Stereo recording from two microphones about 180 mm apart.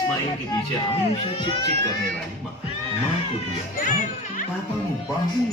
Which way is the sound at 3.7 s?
45° left (ahead or behind).